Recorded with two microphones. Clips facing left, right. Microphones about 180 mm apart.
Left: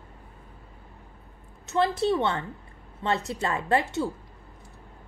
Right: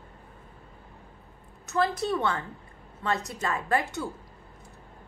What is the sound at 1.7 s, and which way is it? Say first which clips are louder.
A woman's voice: left 3 dB; 25° left (ahead or behind).